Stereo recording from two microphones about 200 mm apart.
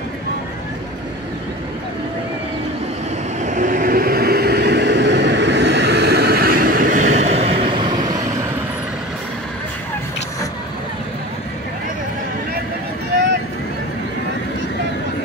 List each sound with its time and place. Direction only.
3.4 s vehicle: 40° right (ahead or behind); by 8.1 s 20° right (ahead or behind)